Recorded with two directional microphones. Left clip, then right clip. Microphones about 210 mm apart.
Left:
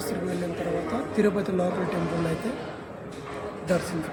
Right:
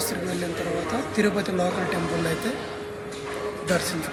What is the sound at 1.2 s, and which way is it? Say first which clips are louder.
Speech: even; 5° right (ahead or behind).